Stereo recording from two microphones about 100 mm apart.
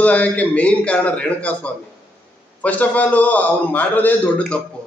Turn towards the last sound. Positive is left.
turn(degrees=15)  # may be behind; listen again after turning